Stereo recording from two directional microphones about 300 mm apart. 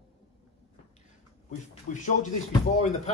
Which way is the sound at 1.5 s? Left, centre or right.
Left.